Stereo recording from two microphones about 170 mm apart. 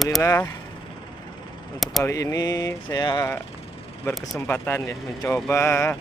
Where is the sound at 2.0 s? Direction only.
20° left (ahead or behind).